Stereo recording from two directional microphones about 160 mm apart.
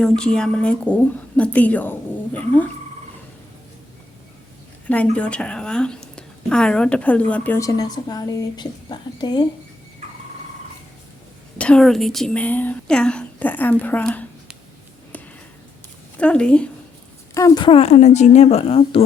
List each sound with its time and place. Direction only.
0.0 s a woman's voice: 5° left (ahead or behind)
4.9 s a woman's voice: 10° left (ahead or behind); by 9.4 s 25° left (ahead or behind)
11.5 s a woman's voice: 5° left (ahead or behind)
16.1 s a woman's voice: 5° left (ahead or behind)
17.3 s speech: 20° left (ahead or behind)